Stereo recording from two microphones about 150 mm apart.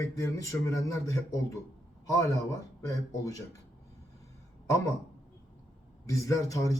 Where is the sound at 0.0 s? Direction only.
20° left (ahead or behind).